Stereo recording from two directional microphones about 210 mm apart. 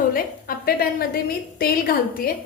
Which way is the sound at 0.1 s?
45° left (ahead or behind).